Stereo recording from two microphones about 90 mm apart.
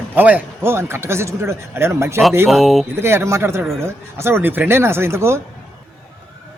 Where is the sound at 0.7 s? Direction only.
30° right (ahead or behind).